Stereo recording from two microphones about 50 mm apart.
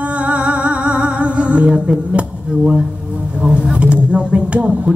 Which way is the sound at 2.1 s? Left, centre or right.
Right.